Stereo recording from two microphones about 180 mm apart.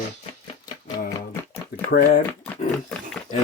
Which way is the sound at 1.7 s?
55° left (ahead or behind).